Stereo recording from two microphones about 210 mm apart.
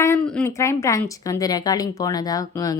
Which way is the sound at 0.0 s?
10° left (ahead or behind).